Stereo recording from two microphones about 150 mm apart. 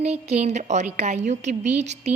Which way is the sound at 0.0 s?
45° right (ahead or behind).